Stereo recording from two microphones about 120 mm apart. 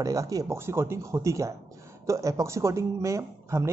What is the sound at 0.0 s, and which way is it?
Speech, 30° right (ahead or behind).